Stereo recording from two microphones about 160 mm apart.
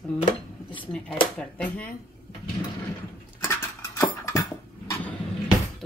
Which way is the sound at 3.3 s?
15° left (ahead or behind).